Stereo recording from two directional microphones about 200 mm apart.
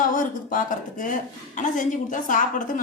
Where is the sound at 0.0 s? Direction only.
40° left (ahead or behind).